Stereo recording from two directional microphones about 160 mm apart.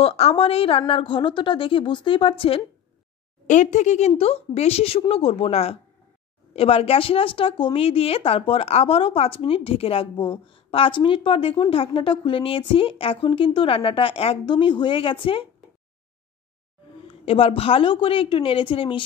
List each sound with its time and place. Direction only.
0.0 s a woman's voice: 40° left (ahead or behind)
3.4 s a woman's voice: 50° left (ahead or behind)
17.2 s a woman's voice: 35° left (ahead or behind)